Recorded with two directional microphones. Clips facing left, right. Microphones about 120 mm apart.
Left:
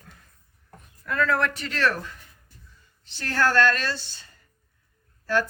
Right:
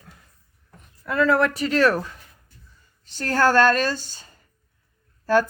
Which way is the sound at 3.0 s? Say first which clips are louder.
Right 4 dB; 45° right (ahead or behind).